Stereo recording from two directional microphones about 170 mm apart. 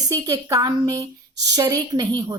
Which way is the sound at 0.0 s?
20° right (ahead or behind).